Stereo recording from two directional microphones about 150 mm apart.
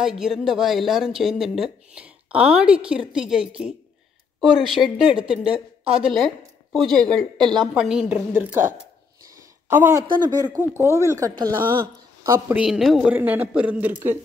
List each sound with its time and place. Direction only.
0.0 s speech: 5° right (ahead or behind)
9.7 s speech: 15° right (ahead or behind)
12.5 s speech: 5° right (ahead or behind)